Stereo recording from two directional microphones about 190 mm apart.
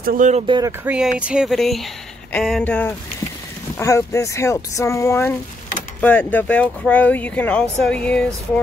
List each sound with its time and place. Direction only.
0.0 s speech: 45° right (ahead or behind)
0.5 s speech: 20° right (ahead or behind)
0.8 s speech: 5° right (ahead or behind)